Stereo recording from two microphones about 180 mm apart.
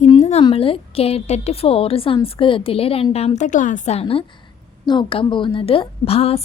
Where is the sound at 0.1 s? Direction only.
35° left (ahead or behind).